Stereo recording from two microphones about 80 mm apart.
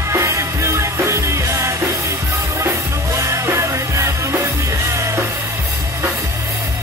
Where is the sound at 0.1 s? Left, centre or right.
Right.